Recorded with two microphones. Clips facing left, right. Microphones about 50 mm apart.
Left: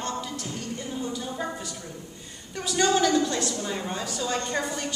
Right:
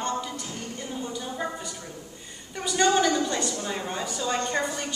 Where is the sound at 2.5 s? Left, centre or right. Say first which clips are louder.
Right 1 dB; centre.